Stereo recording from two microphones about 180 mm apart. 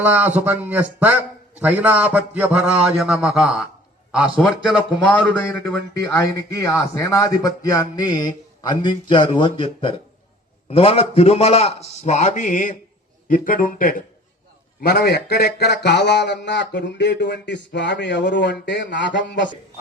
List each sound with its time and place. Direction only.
0.0 s a man's voice: 10° right (ahead or behind); by 19.5 s 80° left